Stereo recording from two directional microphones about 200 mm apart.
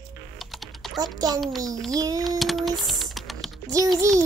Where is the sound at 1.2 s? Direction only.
20° right (ahead or behind).